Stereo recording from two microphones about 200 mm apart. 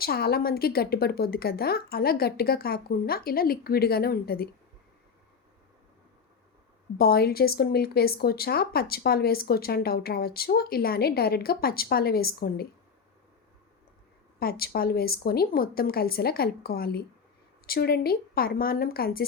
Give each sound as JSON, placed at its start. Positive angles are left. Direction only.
{"t": 0.0, "sound": "speech", "side_deg": 50}
{"t": 7.0, "sound": "speech", "side_deg": 50}
{"t": 14.3, "sound": "speech", "side_deg": 50}